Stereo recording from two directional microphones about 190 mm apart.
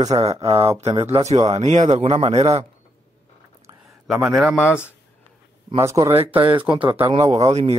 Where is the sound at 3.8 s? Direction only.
Centre (ahead or behind).